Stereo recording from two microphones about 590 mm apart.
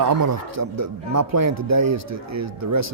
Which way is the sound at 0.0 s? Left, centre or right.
Right.